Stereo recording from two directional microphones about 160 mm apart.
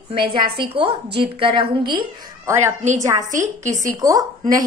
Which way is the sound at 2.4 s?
15° right (ahead or behind).